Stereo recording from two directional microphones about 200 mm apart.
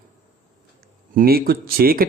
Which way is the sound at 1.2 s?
50° right (ahead or behind).